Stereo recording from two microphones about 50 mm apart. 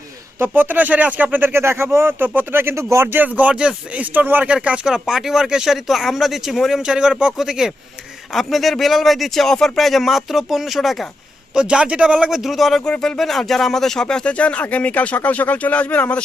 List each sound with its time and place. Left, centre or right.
0.3 s speech: right
1.5 s speech: right
2.1 s speech: right
2.7 s speech: right
3.2 s speech: right
3.5 s speech: centre
4.0 s speech: right
4.4 s speech: right; by 11.0 s centre
11.5 s speech: centre
12.3 s speech: centre
12.8 s speech: centre
14.3 s speech: left